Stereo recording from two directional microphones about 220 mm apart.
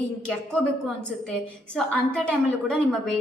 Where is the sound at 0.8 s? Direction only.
5° left (ahead or behind).